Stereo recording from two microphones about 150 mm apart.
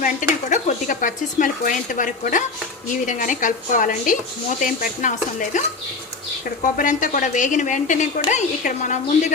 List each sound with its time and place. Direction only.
0.0 s speech: 60° left (ahead or behind)
6.7 s speech: 60° left (ahead or behind)